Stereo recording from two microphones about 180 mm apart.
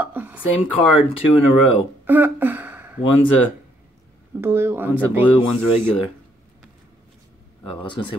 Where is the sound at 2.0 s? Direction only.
10° right (ahead or behind).